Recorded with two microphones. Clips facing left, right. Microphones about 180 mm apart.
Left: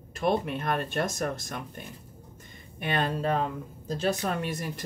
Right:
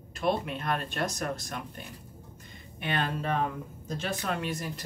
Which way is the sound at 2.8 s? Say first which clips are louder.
Left 3 dB; 45° left (ahead or behind).